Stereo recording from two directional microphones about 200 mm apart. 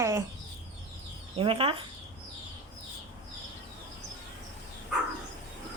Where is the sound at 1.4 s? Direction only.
25° right (ahead or behind).